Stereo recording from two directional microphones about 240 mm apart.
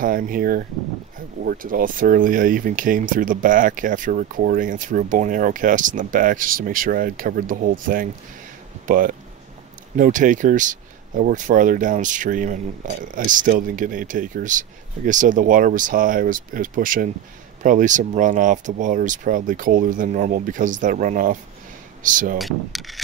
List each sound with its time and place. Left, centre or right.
0.0 s speech: right
22.4 s coin: centre